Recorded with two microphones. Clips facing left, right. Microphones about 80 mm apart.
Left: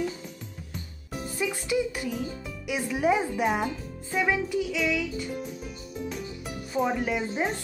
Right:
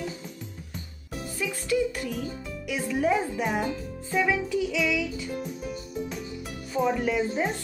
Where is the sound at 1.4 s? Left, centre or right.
Centre.